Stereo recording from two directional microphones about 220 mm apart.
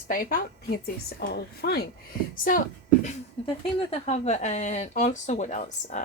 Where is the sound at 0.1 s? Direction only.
40° left (ahead or behind).